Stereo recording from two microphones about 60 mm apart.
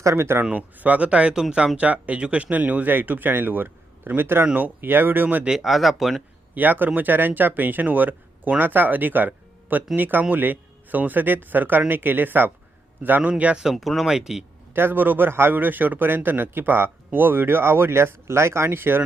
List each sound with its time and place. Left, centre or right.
0.0 s speech: right
0.5 s speech: right
5.5 s speech: centre
6.5 s speech: right
13.6 s speech: centre
14.7 s speech: right